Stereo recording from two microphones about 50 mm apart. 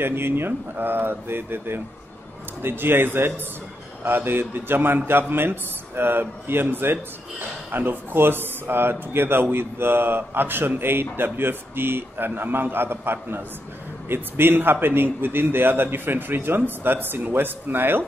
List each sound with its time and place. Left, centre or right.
0.0 s a man's voice: right